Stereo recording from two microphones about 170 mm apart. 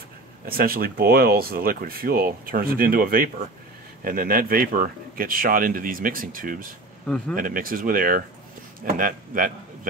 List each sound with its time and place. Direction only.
0.5 s speech: 60° right (ahead or behind)